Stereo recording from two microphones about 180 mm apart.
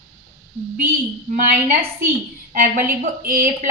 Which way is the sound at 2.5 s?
55° right (ahead or behind).